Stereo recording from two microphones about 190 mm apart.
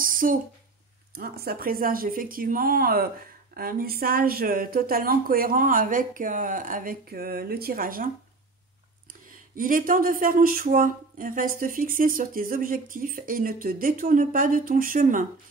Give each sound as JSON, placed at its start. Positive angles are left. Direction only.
{"t": 0.0, "sound": "a sound", "side_deg": -45}
{"t": 1.1, "sound": "speech", "side_deg": -55}
{"t": 9.3, "sound": "speech", "side_deg": -45}